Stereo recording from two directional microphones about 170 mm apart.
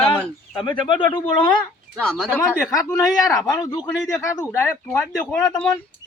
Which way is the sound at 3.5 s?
25° left (ahead or behind).